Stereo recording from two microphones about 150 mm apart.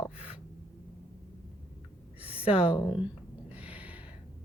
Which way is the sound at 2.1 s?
10° right (ahead or behind).